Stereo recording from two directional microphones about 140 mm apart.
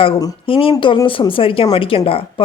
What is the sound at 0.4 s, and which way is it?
A woman's voice, 40° left (ahead or behind).